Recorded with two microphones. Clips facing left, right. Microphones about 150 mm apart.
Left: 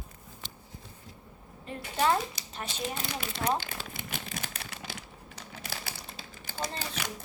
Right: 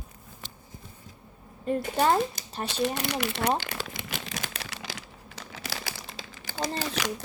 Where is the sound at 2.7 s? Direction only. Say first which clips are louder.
Right 8 dB; 70° right (ahead or behind).